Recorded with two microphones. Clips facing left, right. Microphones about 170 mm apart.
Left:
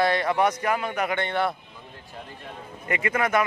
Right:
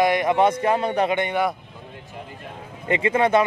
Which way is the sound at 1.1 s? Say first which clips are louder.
Right 3 dB; 15° right (ahead or behind).